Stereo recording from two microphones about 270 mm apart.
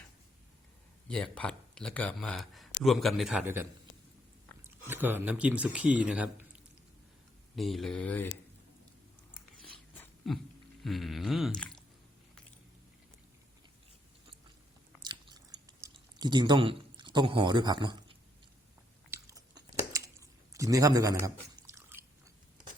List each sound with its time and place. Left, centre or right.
1.0 s speech: centre
4.9 s speech: centre
7.5 s speech: centre
9.6 s dog: centre
10.8 s speech: centre
15.6 s a sound: centre
19.1 s chewing: centre